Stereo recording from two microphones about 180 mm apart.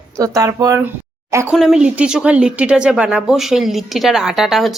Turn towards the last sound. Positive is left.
turn(degrees=0)  # may be behind; listen again after turning